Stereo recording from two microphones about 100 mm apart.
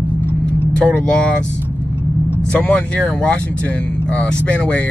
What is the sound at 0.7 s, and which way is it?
Speech, 10° left (ahead or behind).